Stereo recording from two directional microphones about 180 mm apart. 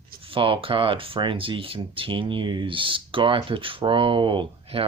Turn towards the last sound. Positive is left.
turn(degrees=-30)  # may be behind; listen again after turning